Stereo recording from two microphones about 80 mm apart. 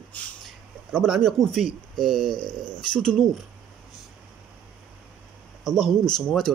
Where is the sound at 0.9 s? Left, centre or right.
Centre.